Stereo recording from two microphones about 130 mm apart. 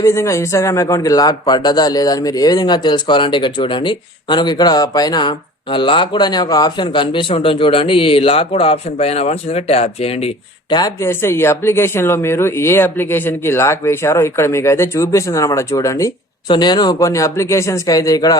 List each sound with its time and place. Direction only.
0.0 s a man's voice: 20° left (ahead or behind); by 10.3 s 50° left (ahead or behind)
10.7 s a man's voice: 35° left (ahead or behind)
11.0 s speech: 20° left (ahead or behind)